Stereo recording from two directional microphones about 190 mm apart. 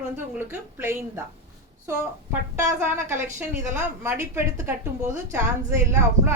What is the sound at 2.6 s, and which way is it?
A woman's voice, 15° right (ahead or behind).